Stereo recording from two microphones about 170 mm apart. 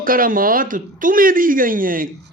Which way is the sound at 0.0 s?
55° right (ahead or behind).